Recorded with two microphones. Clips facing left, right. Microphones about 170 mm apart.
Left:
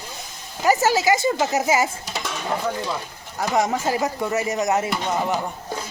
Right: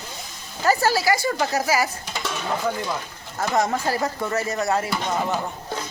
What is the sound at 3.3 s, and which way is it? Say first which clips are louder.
Speech: left 1 dB; 15° left (ahead or behind).